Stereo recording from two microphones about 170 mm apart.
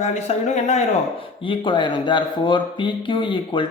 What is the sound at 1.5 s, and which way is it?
Speech, 25° left (ahead or behind).